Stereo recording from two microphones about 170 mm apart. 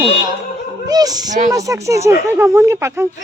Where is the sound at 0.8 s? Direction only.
20° right (ahead or behind).